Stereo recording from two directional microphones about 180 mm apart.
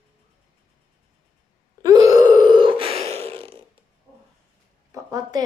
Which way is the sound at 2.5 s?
25° right (ahead or behind).